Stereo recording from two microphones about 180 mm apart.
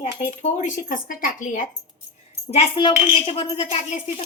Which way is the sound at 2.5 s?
30° left (ahead or behind).